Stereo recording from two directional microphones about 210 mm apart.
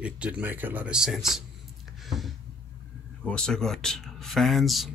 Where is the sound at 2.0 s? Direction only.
Centre (ahead or behind).